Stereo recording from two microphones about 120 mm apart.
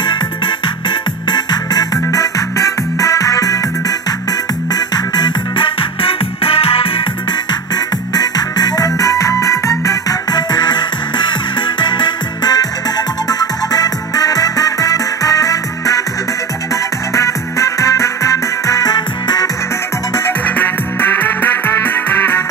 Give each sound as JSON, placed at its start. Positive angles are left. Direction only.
{"t": 0.8, "sound": "music", "side_deg": 35}
{"t": 7.7, "sound": "music", "side_deg": 35}
{"t": 17.1, "sound": "music", "side_deg": 25}
{"t": 20.4, "sound": "music", "side_deg": 15}